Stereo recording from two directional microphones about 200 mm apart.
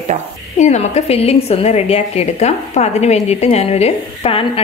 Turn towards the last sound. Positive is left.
turn(degrees=30)  # may be behind; listen again after turning